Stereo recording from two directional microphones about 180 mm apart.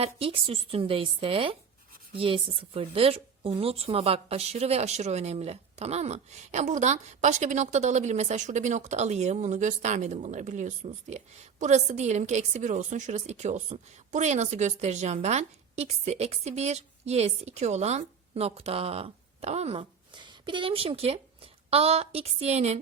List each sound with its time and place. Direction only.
0.0 s a woman's voice: 30° right (ahead or behind)